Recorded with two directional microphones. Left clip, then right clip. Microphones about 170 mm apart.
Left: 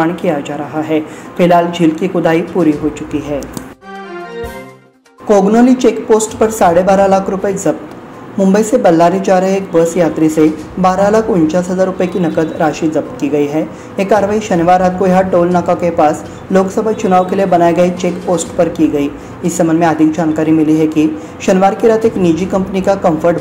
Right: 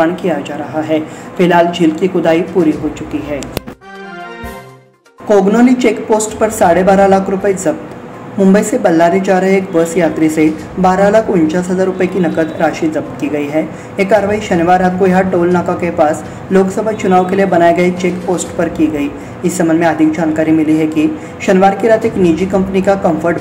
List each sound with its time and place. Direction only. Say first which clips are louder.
0.0 s a woman's voice: right 1 dB; 25° left (ahead or behind)
5.3 s a woman's voice: even; 20° left (ahead or behind)